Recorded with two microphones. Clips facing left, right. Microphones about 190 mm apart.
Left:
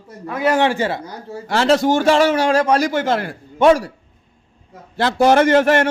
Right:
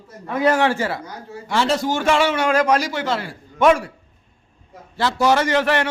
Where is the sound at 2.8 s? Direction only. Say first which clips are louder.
Left 5 dB; 50° left (ahead or behind).